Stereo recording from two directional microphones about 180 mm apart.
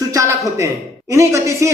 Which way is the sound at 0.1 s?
15° right (ahead or behind).